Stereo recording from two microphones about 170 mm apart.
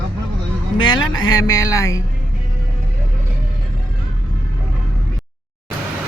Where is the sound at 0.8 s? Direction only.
25° left (ahead or behind).